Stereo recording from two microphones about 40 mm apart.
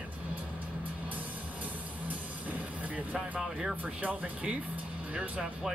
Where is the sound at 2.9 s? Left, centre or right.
Right.